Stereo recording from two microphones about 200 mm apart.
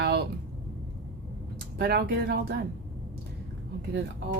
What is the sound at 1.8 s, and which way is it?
Speech, 50° right (ahead or behind).